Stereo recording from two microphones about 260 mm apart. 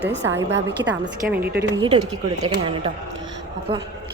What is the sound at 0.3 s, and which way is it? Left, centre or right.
A woman's voice, centre.